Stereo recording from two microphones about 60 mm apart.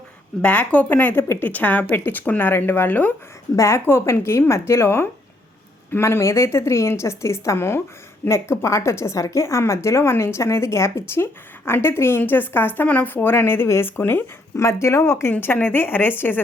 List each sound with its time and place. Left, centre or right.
0.4 s speech: left
3.5 s a woman's voice: left
3.8 s a woman's voice: left
14.0 s a woman's voice: left
14.5 s a woman's voice: left
15.3 s a woman's voice: left